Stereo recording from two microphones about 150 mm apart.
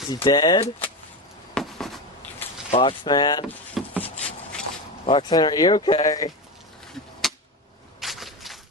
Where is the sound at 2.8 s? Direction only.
30° left (ahead or behind).